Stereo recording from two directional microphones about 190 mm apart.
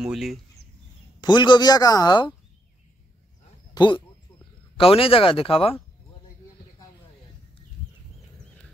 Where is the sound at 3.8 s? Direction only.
25° left (ahead or behind).